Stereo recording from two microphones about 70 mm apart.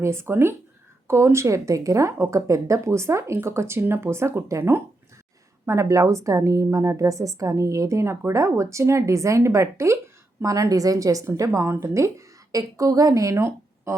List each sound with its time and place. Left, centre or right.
0.0 s a woman's voice: right
10.4 s a woman's voice: right